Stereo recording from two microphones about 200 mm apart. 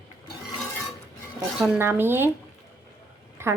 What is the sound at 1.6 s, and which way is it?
Speech, 10° right (ahead or behind).